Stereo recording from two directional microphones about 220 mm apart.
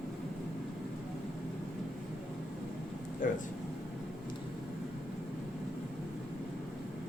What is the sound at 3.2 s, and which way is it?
Vehicle, 35° left (ahead or behind).